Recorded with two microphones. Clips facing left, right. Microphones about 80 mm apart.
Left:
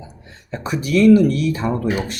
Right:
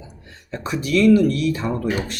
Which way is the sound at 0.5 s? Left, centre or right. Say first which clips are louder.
Left 2 dB; left.